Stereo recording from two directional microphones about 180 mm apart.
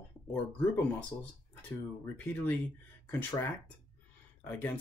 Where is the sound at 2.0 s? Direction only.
10° left (ahead or behind).